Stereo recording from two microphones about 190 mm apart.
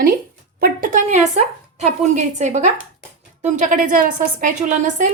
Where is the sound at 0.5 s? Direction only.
50° right (ahead or behind).